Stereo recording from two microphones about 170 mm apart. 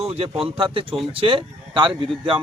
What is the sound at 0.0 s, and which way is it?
Speech, 35° right (ahead or behind).